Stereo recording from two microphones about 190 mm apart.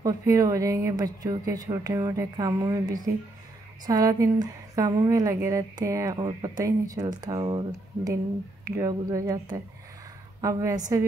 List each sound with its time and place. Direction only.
0.0 s a woman's voice: 20° right (ahead or behind)